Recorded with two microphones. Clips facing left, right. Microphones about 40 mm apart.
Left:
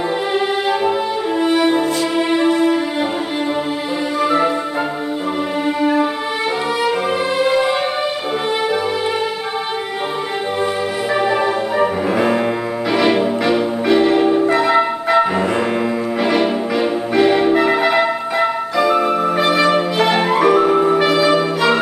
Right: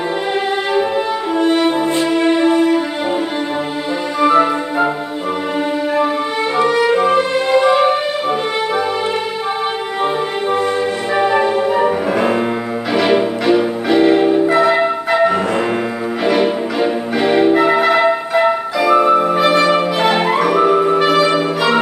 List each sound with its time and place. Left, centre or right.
4.3 s music: centre
6.6 s music: centre
11.1 s music: centre
19.3 s music: centre
20.3 s music: centre
20.9 s music: centre